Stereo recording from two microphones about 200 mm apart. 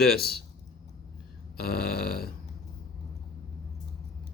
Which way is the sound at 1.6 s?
50° left (ahead or behind).